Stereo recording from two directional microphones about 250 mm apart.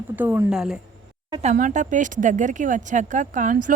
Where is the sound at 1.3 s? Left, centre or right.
Right.